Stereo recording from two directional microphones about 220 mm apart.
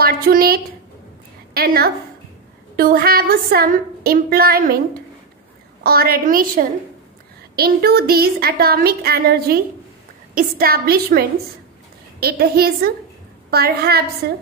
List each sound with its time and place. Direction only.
0.0 s a sound: 40° right (ahead or behind)
1.5 s a woman's voice: 45° right (ahead or behind)
5.9 s a woman's voice: 45° right (ahead or behind)